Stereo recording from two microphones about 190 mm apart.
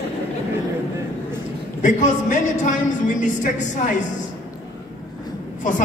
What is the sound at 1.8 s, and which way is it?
A man's voice, 40° left (ahead or behind).